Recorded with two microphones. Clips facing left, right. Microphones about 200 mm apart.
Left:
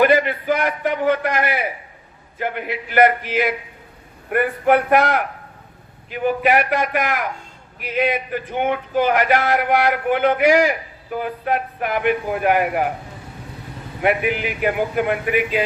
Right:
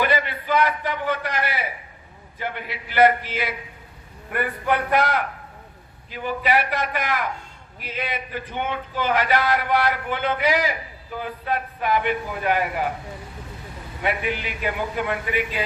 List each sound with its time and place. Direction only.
0.0 s a man's voice: 50° left (ahead or behind)
14.0 s a man's voice: 55° left (ahead or behind)